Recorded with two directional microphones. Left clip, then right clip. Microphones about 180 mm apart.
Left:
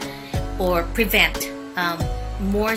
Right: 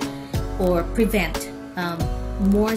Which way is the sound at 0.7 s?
5° right (ahead or behind).